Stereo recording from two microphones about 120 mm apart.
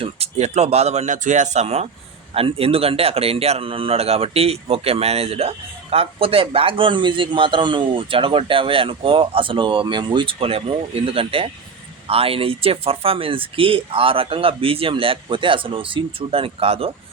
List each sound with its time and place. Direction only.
0.0 s speech: 60° right (ahead or behind)
2.3 s speech: 50° right (ahead or behind)